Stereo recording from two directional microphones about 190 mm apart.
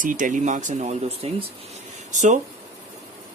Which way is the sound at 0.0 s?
45° right (ahead or behind).